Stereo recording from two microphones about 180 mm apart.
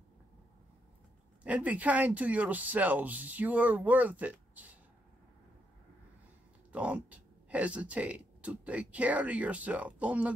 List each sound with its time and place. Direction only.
1.4 s speech: 5° right (ahead or behind)
6.7 s speech: 5° right (ahead or behind)